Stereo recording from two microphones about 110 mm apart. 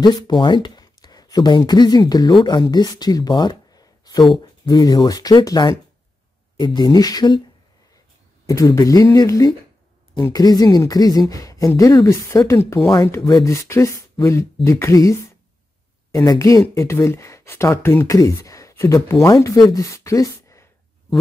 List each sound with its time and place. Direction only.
0.0 s speech: 45° left (ahead or behind)
8.5 s speech: 30° left (ahead or behind)
16.3 s speech: 30° left (ahead or behind)